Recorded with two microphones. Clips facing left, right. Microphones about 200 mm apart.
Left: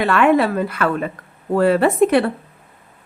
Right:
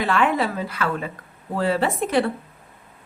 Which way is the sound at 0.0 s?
60° left (ahead or behind).